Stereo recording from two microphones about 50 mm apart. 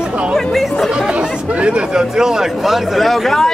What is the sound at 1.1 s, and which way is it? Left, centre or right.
Speech, right.